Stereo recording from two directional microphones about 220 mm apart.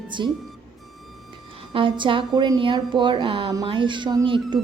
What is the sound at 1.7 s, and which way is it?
A woman's voice, 25° right (ahead or behind).